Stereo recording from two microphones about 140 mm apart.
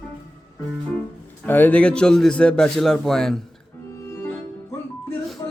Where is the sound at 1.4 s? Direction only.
15° left (ahead or behind).